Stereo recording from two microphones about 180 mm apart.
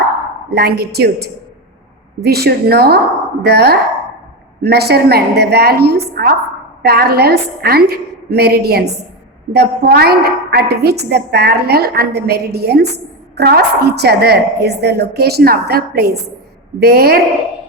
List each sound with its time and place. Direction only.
0.5 s a woman's voice: 60° right (ahead or behind)